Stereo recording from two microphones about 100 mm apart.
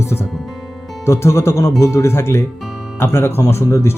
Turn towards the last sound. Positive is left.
turn(degrees=25)  # may be behind; listen again after turning